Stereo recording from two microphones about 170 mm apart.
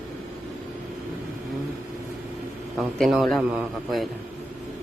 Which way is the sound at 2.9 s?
Centre (ahead or behind).